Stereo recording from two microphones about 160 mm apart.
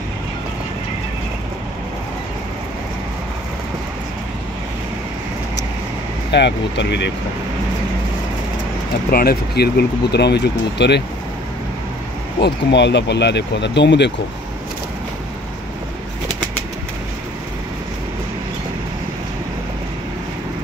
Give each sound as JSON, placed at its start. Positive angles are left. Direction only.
{"t": 6.3, "sound": "speech", "side_deg": 90}
{"t": 9.1, "sound": "speech", "side_deg": 75}
{"t": 12.4, "sound": "speech", "side_deg": 90}